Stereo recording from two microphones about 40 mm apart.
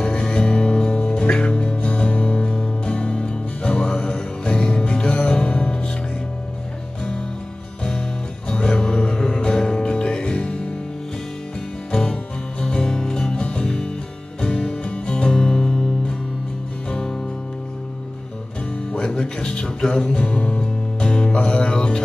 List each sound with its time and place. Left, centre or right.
0.0 s music: centre
8.5 s music: left
11.9 s music: centre
13.4 s music: left
18.9 s music: left